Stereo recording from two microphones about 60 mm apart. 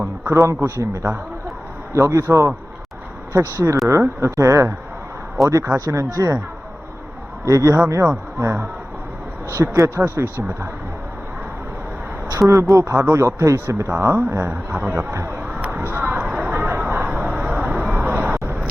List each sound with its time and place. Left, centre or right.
0.0 s a man's voice: right
7.4 s speech: right
12.3 s speech: right
15.1 s speech: right
15.7 s a sound: right